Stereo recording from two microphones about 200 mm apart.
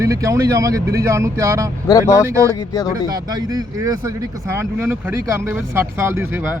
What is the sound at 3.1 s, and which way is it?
Speech, 20° right (ahead or behind).